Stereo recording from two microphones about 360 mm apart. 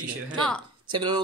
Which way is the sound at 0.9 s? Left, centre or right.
Centre.